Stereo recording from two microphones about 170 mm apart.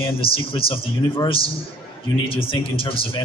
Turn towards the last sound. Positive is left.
turn(degrees=30)  # may be behind; listen again after turning